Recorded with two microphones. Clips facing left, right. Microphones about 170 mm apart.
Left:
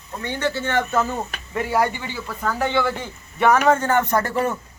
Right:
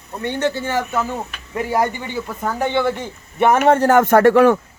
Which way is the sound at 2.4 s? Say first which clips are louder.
Right 2 dB; 20° right (ahead or behind).